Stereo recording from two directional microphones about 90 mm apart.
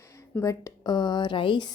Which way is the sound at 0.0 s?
35° left (ahead or behind).